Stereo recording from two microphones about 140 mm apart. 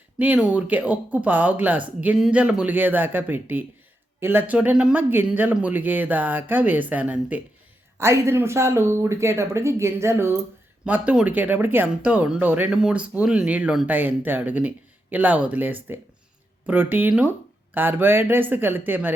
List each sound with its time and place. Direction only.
0.2 s speech: 10° right (ahead or behind)